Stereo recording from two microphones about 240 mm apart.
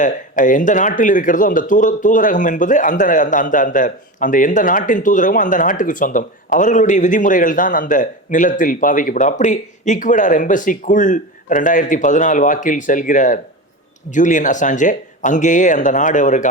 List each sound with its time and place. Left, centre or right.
0.0 s speech: left